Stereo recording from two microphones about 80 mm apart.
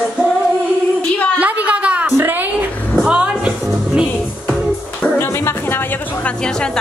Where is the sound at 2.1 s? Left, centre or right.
Right.